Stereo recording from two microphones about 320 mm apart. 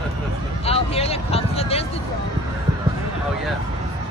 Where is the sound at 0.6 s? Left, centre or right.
Centre.